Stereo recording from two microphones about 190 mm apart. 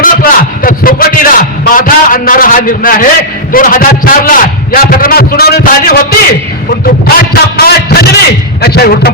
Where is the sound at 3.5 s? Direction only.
45° left (ahead or behind).